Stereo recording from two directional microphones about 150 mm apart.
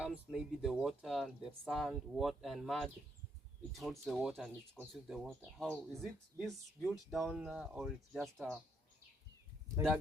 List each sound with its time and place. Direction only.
0.0 s speech: centre (ahead or behind)
5.5 s speech: 10° left (ahead or behind)